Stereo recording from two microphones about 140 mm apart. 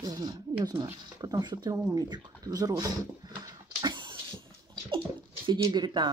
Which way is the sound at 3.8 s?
35° right (ahead or behind).